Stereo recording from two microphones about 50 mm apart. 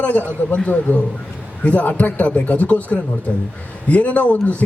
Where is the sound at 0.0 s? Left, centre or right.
Left.